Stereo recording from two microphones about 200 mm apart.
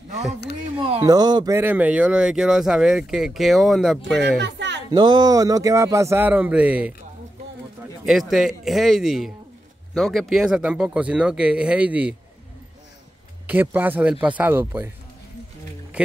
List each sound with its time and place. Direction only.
0.7 s a sound: 30° right (ahead or behind)
1.0 s speech: 20° right (ahead or behind); by 4.4 s centre (ahead or behind)
4.4 s a sound: 60° right (ahead or behind)
4.9 s speech: 20° right (ahead or behind)
8.0 s speech: centre (ahead or behind)
13.5 s speech: 10° right (ahead or behind)